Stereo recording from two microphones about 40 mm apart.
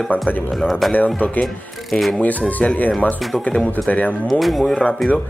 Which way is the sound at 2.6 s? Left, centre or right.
Left.